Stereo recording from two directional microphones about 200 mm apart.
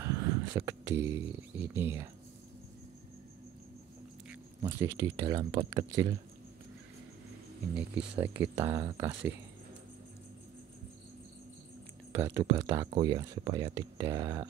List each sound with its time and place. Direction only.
0.0 s speech: 15° right (ahead or behind)
4.7 s speech: 15° right (ahead or behind)
7.7 s speech: 5° right (ahead or behind)
8.5 s speech: 20° right (ahead or behind)
12.1 s speech: 15° right (ahead or behind)